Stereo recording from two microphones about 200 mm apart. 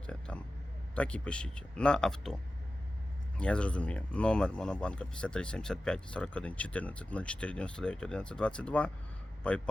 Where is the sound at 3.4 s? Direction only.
5° left (ahead or behind).